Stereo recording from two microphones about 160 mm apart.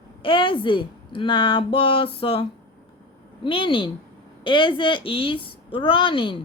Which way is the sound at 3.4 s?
30° left (ahead or behind).